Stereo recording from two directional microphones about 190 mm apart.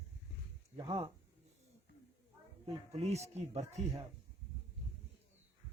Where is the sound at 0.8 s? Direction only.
25° right (ahead or behind).